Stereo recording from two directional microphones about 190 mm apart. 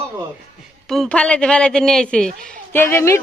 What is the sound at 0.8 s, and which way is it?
A man's voice, centre (ahead or behind).